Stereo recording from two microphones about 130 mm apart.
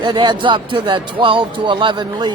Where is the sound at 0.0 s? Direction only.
35° right (ahead or behind).